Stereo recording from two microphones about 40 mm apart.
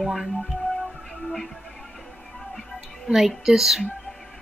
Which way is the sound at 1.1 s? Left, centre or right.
Centre.